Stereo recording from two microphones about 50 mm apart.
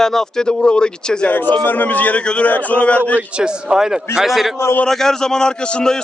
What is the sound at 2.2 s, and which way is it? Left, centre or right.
Speech, centre.